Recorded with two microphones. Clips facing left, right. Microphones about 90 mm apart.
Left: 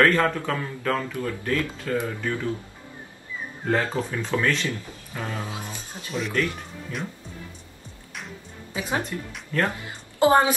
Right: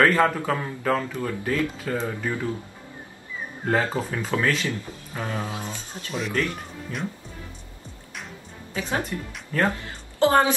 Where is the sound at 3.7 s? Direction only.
5° right (ahead or behind).